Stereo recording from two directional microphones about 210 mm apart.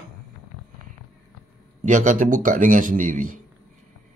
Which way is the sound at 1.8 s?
35° right (ahead or behind).